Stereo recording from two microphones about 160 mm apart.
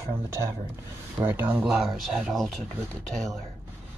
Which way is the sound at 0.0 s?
20° right (ahead or behind).